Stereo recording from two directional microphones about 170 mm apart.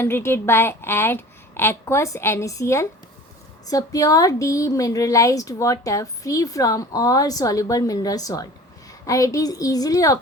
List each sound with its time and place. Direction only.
0.0 s a woman's voice: 15° left (ahead or behind)